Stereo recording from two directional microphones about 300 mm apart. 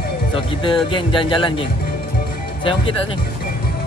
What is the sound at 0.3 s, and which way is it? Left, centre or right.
Speech, centre.